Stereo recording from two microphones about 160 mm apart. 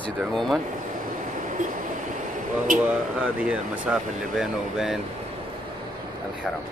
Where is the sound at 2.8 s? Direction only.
5° right (ahead or behind).